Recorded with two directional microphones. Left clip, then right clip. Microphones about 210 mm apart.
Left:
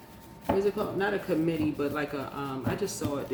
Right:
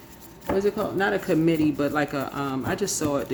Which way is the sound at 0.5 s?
55° right (ahead or behind).